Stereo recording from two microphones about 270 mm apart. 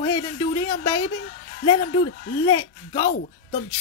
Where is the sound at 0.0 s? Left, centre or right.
Centre.